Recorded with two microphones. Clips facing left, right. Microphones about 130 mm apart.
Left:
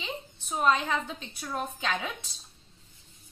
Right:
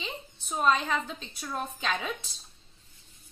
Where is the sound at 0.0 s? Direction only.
15° left (ahead or behind).